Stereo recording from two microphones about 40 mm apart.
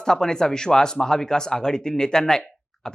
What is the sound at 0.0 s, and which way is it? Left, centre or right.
Speech, centre.